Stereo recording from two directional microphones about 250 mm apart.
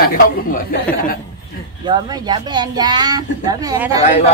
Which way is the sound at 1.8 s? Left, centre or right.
Centre.